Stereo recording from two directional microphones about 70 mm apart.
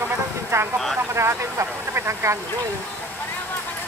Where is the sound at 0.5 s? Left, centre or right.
Right.